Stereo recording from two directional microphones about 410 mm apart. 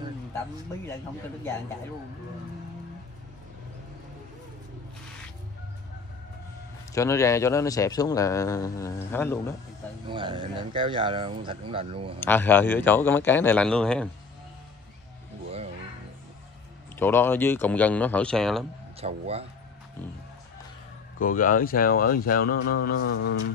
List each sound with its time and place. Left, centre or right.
6.9 s a man's voice: centre
10.0 s speech: centre
12.2 s a man's voice: centre
16.9 s a man's voice: centre
18.9 s speech: centre
21.2 s speech: centre